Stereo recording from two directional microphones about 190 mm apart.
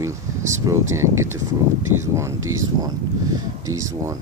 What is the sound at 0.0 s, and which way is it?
Speech, 15° right (ahead or behind).